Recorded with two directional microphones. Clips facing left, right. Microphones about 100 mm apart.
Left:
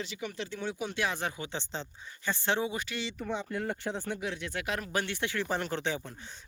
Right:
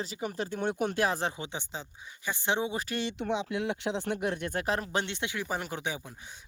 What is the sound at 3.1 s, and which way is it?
Speech, 80° right.